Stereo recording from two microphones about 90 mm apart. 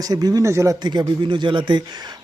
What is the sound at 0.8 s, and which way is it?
Speech, 55° right (ahead or behind).